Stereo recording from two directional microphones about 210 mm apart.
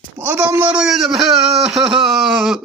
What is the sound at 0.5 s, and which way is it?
A man's voice, 5° right (ahead or behind).